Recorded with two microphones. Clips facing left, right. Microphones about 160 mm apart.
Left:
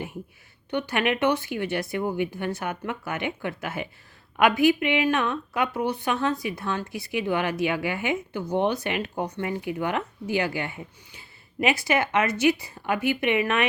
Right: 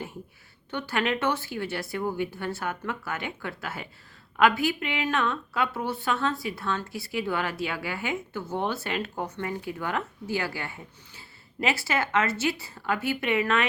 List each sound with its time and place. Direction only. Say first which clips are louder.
0.7 s a woman's voice: left 3 dB; 15° left (ahead or behind)